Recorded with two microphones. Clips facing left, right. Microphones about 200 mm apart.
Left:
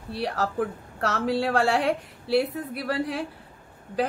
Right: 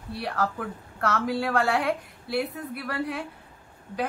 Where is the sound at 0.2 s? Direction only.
30° left (ahead or behind).